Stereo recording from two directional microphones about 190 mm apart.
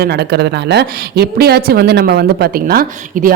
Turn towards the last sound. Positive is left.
turn(degrees=-50)  # may be behind; listen again after turning